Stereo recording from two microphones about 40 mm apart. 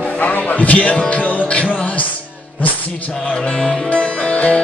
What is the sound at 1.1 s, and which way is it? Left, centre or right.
Music, left.